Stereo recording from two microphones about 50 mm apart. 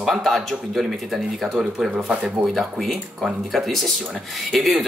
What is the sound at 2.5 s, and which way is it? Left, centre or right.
Speech, centre.